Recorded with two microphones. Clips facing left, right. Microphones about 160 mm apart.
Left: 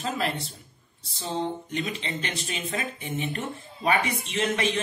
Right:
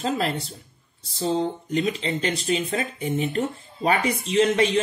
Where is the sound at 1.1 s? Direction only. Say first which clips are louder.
Right 6 dB; 35° right (ahead or behind).